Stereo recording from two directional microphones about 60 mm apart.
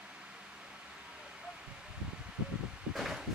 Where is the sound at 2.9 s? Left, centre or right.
Centre.